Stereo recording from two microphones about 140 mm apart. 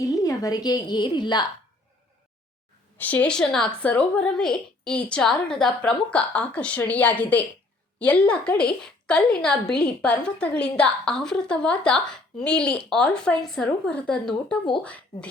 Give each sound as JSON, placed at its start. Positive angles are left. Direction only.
{"t": 0.0, "sound": "a woman's voice", "side_deg": 25}
{"t": 3.0, "sound": "a woman's voice", "side_deg": 10}